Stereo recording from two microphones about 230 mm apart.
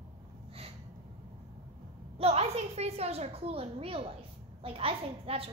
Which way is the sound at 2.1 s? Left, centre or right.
Right.